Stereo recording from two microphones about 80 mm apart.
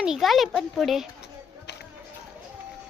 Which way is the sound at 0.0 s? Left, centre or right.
Centre.